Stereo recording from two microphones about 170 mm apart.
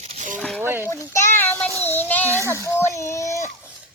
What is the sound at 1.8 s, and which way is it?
Child singing, 10° left (ahead or behind).